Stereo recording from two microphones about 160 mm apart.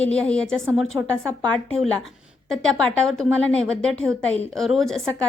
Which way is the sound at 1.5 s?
5° left (ahead or behind).